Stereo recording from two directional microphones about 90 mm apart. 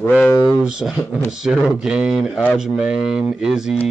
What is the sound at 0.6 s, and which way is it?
Speech, 5° right (ahead or behind).